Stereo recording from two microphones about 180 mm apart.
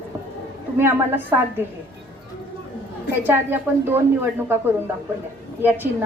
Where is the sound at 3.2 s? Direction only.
10° right (ahead or behind).